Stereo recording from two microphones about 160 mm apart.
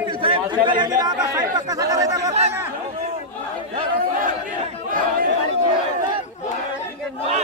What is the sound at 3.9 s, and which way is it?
Speech, 60° right (ahead or behind).